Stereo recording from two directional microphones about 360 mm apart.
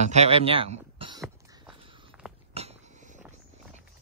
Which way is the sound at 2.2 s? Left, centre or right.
Centre.